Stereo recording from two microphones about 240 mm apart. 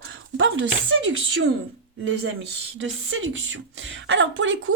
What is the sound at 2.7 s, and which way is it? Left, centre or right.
Speech, right.